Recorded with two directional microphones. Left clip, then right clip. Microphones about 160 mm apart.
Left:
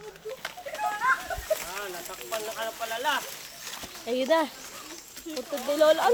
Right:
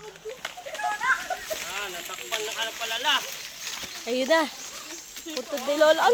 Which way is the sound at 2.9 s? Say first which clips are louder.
Right 3 dB; 30° left (ahead or behind).